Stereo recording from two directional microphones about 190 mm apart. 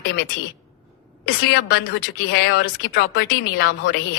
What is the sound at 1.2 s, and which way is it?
Speech, 65° left (ahead or behind).